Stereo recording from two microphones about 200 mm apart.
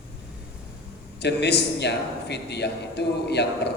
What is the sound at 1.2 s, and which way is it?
A man's voice, 55° left (ahead or behind).